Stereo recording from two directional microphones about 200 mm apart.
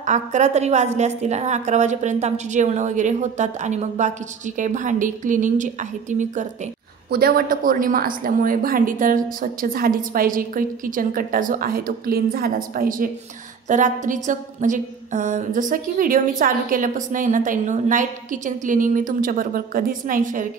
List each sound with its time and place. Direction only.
0.0 s a woman's voice: 35° right (ahead or behind)
7.1 s a woman's voice: 50° right (ahead or behind)